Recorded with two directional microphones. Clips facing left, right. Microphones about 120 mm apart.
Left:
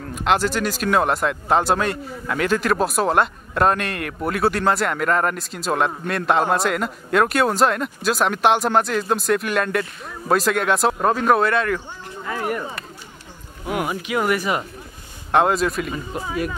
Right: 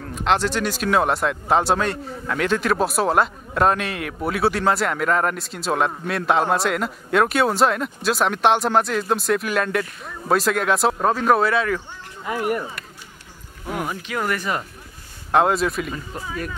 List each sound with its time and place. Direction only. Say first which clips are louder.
0.0 s speech: left 1 dB; 5° left (ahead or behind)
12.3 s speech: right 2 dB; 15° right (ahead or behind)
13.7 s speech: left 3 dB; 10° left (ahead or behind)
15.3 s speech: even; centre (ahead or behind)